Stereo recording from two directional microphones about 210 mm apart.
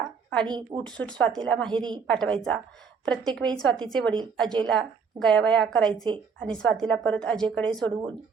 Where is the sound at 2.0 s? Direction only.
5° left (ahead or behind).